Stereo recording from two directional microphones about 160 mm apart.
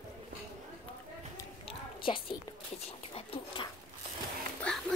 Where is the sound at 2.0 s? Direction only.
30° left (ahead or behind).